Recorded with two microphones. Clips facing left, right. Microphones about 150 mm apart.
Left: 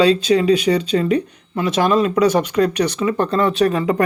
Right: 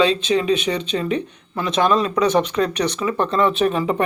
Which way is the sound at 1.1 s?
30° right (ahead or behind).